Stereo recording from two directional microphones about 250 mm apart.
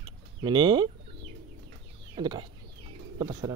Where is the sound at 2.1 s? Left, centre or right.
Centre.